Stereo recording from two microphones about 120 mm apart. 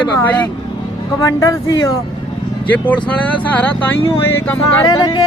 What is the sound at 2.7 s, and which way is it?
Speech, 15° left (ahead or behind).